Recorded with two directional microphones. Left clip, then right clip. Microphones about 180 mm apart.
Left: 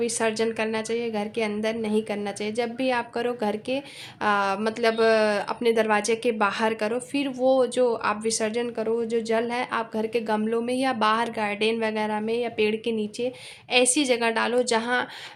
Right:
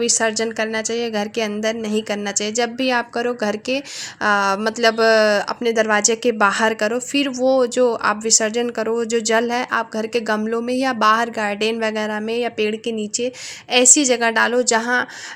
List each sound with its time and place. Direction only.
0.0 s a woman's voice: 25° right (ahead or behind)